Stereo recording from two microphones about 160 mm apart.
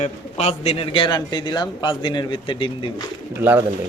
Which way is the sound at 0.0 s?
40° left (ahead or behind).